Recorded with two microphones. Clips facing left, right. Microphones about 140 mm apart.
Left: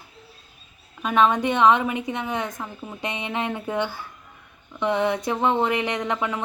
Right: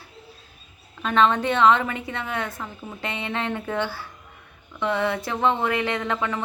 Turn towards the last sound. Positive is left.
turn(degrees=15)  # may be behind; listen again after turning